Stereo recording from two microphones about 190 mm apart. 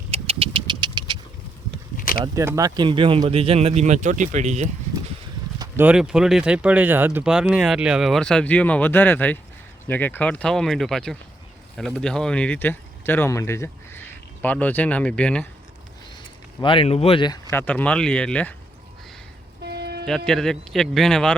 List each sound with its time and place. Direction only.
0.1 s engine: 30° right (ahead or behind)
2.0 s a sound: 45° left (ahead or behind)
2.2 s speech: 15° right (ahead or behind); by 4.7 s 35° right (ahead or behind)
5.5 s speech: 10° right (ahead or behind); by 15.4 s 5° left (ahead or behind)
16.6 s speech: 25° left (ahead or behind)
17.5 s speech: 10° left (ahead or behind)
19.6 s a sound: 60° right (ahead or behind)
20.1 s speech: centre (ahead or behind)